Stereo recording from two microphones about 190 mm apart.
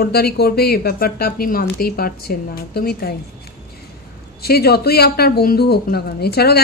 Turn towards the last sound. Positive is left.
turn(degrees=55)  # may be behind; listen again after turning